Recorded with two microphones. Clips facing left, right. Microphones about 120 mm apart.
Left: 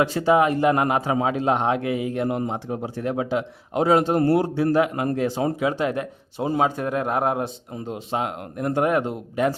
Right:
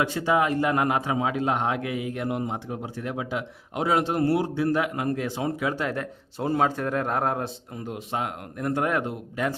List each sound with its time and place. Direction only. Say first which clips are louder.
0.3 s a man's voice: left 5 dB; 25° left (ahead or behind)
5.5 s a man's voice: left 4 dB; 20° left (ahead or behind)
7.9 s speech: left 3 dB; 25° left (ahead or behind)